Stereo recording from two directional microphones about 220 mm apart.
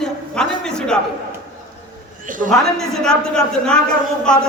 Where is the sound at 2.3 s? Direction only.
35° right (ahead or behind).